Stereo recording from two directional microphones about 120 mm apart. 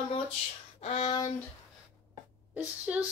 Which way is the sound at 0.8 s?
65° left (ahead or behind).